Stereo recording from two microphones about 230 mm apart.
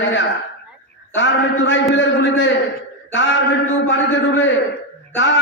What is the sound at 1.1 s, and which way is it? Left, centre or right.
A man's voice, left.